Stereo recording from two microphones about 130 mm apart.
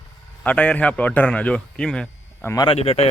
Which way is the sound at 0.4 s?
10° left (ahead or behind).